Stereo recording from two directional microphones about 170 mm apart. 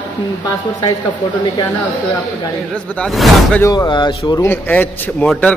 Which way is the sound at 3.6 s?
25° left (ahead or behind).